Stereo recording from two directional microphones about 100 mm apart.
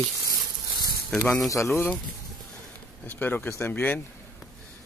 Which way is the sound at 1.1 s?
5° left (ahead or behind).